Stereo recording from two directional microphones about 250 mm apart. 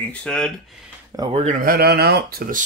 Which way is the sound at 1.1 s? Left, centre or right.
Centre.